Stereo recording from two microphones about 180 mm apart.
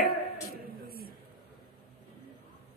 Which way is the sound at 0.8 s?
55° right (ahead or behind).